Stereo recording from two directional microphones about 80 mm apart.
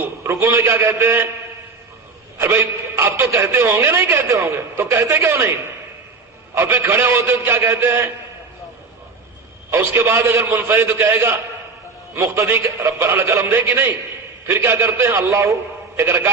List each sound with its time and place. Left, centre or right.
0.0 s speech: right
2.4 s speech: right
6.5 s speech: right
9.6 s a man's voice: right